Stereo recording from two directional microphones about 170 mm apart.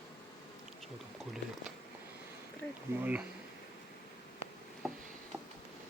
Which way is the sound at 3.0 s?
10° right (ahead or behind).